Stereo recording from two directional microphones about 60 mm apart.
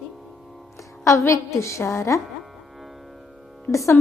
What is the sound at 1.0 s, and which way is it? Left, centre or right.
A woman's voice, left.